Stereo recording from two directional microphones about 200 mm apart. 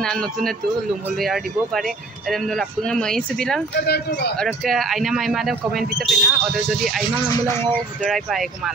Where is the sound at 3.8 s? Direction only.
55° left (ahead or behind).